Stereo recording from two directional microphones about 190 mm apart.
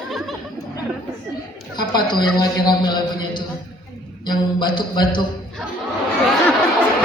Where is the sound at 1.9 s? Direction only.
20° left (ahead or behind).